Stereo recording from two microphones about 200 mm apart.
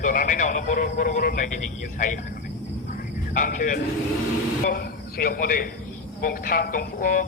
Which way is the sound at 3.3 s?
40° left (ahead or behind).